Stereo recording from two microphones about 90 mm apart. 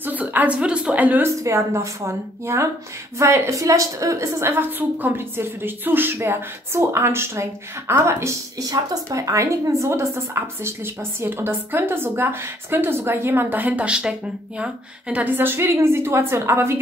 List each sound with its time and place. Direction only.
0.0 s a woman's voice: 20° right (ahead or behind)
1.4 s a woman's voice: 35° right (ahead or behind)